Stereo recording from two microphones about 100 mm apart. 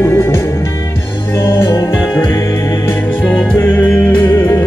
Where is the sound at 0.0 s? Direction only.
25° left (ahead or behind).